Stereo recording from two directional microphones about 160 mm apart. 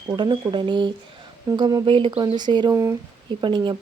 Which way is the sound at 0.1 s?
25° right (ahead or behind).